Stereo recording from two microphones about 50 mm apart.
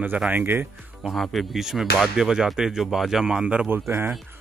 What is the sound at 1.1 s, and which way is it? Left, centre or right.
Speech, centre.